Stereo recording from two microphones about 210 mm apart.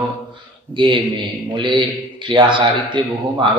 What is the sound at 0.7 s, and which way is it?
A man's voice, 25° right (ahead or behind).